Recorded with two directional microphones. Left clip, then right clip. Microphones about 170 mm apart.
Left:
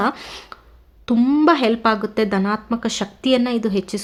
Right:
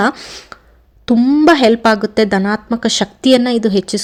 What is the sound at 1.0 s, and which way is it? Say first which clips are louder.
Speech: right 5 dB; 15° right (ahead or behind).